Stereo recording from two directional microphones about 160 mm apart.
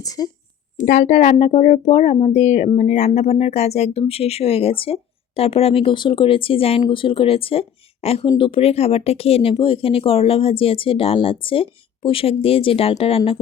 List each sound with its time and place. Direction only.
0.0 s a woman's voice: 20° left (ahead or behind)
0.8 s speech: 50° left (ahead or behind); by 13.4 s 35° left (ahead or behind)